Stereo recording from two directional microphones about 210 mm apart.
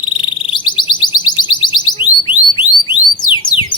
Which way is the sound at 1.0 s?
20° left (ahead or behind).